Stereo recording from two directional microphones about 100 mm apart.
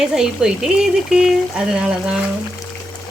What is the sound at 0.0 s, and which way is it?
Speech, 5° right (ahead or behind).